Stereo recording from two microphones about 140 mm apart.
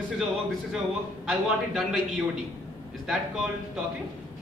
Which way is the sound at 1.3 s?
Centre (ahead or behind).